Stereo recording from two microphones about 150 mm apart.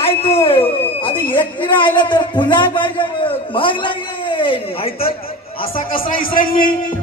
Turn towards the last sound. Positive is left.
turn(degrees=70)  # may be behind; listen again after turning